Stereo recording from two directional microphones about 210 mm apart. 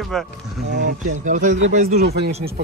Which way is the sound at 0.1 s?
Centre (ahead or behind).